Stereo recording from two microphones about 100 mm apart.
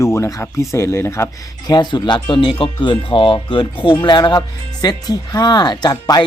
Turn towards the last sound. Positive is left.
turn(degrees=40)  # may be behind; listen again after turning